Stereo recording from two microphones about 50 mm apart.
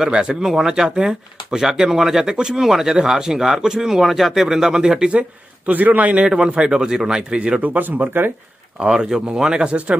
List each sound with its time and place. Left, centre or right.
0.0 s speech: centre
5.7 s a man's voice: right
6.2 s speech: centre
7.7 s a man's voice: right
8.8 s speech: centre